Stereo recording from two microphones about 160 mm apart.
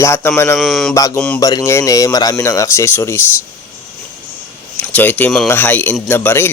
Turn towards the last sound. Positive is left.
turn(degrees=15)  # may be behind; listen again after turning